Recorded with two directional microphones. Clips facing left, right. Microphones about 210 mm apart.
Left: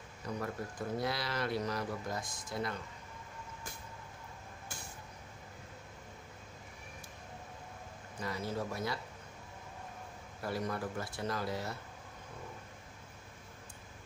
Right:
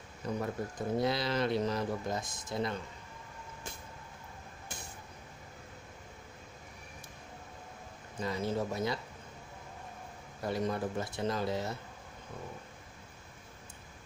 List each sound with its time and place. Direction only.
0.4 s speech: 20° right (ahead or behind)
8.2 s speech: 25° right (ahead or behind)
10.4 s speech: 20° right (ahead or behind)